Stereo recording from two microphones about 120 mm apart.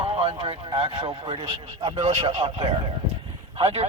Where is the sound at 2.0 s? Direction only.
65° right (ahead or behind).